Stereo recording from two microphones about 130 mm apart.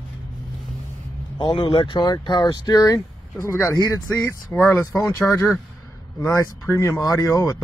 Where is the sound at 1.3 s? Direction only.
40° left (ahead or behind).